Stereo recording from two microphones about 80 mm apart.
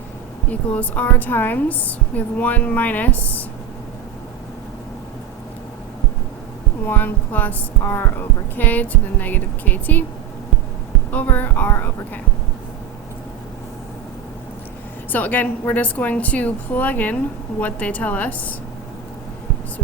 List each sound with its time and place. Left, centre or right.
0.7 s a woman's voice: centre
6.8 s a woman's voice: left
11.1 s a woman's voice: left
15.1 s a woman's voice: left